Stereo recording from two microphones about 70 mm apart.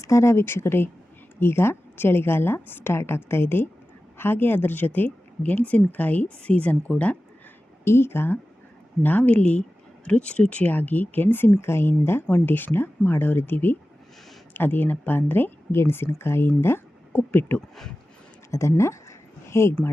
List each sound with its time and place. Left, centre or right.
0.0 s a woman's voice: left
7.9 s a woman's voice: left
9.0 s a woman's voice: left
17.1 s speech: left
18.5 s speech: left